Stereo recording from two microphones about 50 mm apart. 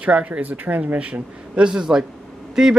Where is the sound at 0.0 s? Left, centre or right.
Right.